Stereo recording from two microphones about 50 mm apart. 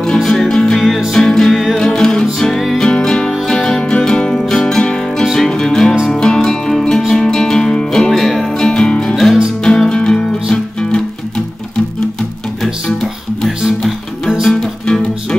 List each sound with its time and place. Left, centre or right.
0.2 s music: centre
0.8 s music: centre
1.1 s music: centre
9.1 s music: centre
9.8 s music: centre
12.8 s music: centre
13.5 s music: centre
14.4 s music: centre